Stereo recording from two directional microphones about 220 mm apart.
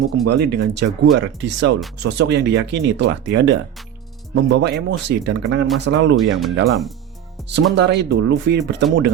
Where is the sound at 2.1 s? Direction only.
55° right (ahead or behind).